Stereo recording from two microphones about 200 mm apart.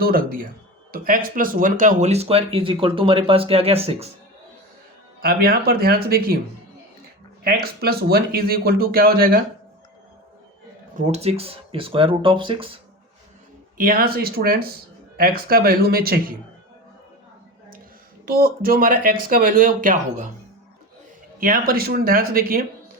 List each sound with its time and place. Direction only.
0.0 s speech: 45° right (ahead or behind); by 4.1 s 30° right (ahead or behind)
5.2 s speech: 45° right (ahead or behind)
7.4 s speech: 50° right (ahead or behind)
10.9 s speech: 35° right (ahead or behind)
13.7 s speech: 45° right (ahead or behind)
18.3 s speech: 45° right (ahead or behind)
21.3 s speech: 45° right (ahead or behind)